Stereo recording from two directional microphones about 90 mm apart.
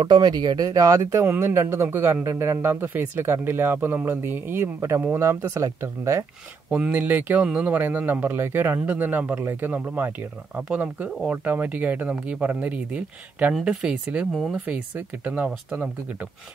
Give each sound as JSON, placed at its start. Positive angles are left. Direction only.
{"t": 0.0, "sound": "speech", "side_deg": -55}
{"t": 6.7, "sound": "speech", "side_deg": -20}
{"t": 14.3, "sound": "speech", "side_deg": 0}
{"t": 14.7, "sound": "speech", "side_deg": -15}